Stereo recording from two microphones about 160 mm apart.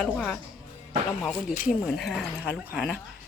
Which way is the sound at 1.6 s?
Centre (ahead or behind).